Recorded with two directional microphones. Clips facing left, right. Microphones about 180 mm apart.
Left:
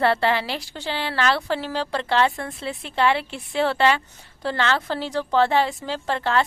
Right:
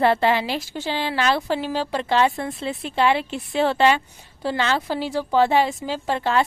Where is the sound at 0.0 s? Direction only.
15° right (ahead or behind).